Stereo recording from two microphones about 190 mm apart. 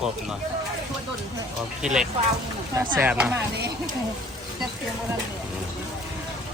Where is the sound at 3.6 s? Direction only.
60° right (ahead or behind).